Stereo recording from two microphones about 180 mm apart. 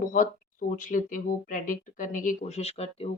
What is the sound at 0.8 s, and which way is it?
Speech, 45° left (ahead or behind).